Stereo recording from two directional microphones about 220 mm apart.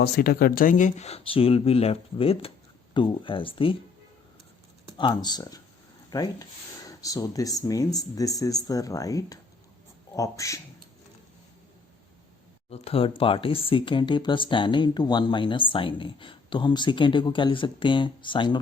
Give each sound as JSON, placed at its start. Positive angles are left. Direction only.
{"t": 0.0, "sound": "speech", "side_deg": 45}
{"t": 4.9, "sound": "speech", "side_deg": 20}
{"t": 12.7, "sound": "speech", "side_deg": 25}